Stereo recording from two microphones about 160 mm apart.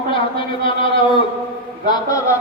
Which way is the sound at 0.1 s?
35° left (ahead or behind).